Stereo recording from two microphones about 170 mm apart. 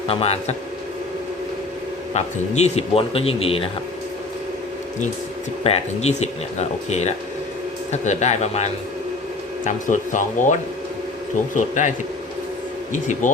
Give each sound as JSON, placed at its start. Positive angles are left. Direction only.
{"t": 0.1, "sound": "a man's voice", "side_deg": 35}
{"t": 2.1, "sound": "a man's voice", "side_deg": 40}
{"t": 5.6, "sound": "a man's voice", "side_deg": 40}
{"t": 12.9, "sound": "speech", "side_deg": 45}